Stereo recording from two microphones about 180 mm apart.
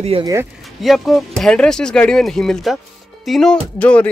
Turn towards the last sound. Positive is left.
turn(degrees=10)  # may be behind; listen again after turning